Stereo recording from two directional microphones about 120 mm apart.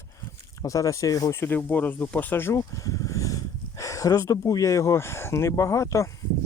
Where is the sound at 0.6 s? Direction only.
30° left (ahead or behind).